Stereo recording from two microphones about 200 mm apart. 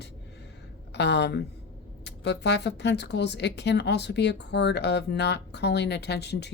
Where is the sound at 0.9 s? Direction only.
55° left (ahead or behind).